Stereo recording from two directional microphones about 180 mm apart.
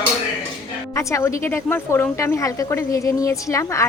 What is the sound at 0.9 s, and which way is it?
Speech, 15° left (ahead or behind).